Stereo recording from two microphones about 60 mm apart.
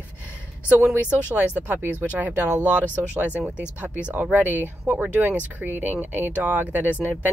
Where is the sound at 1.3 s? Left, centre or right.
Right.